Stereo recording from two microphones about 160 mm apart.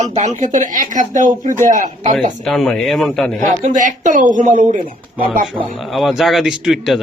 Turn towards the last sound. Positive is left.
turn(degrees=0)  # may be behind; listen again after turning